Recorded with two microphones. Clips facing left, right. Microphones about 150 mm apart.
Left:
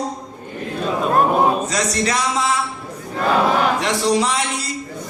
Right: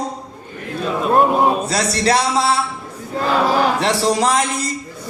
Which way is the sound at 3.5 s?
35° right (ahead or behind).